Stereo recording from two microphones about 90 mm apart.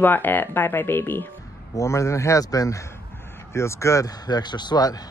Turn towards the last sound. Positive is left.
turn(degrees=50)  # may be behind; listen again after turning